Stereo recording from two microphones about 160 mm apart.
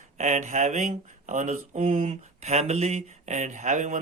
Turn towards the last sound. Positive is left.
turn(degrees=-50)  # may be behind; listen again after turning